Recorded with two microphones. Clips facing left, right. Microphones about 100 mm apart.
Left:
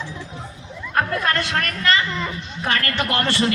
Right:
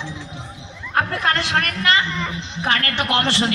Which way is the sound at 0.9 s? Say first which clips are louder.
Right 1 dB; 25° right (ahead or behind).